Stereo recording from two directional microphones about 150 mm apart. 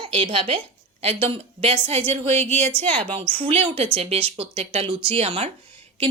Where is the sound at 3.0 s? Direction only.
35° right (ahead or behind).